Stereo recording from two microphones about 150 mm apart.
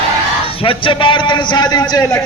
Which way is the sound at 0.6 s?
35° left (ahead or behind).